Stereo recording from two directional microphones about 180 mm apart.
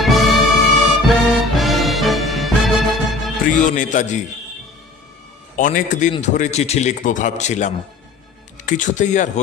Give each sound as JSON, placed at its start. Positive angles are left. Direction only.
{"t": 0.0, "sound": "music", "side_deg": 0}
{"t": 3.6, "sound": "speech", "side_deg": 45}
{"t": 5.6, "sound": "speech", "side_deg": 50}